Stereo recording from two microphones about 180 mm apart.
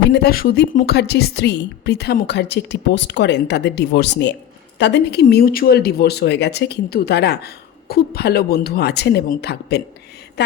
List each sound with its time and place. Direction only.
0.1 s a woman's voice: 60° left (ahead or behind)
5.2 s speech: 55° left (ahead or behind)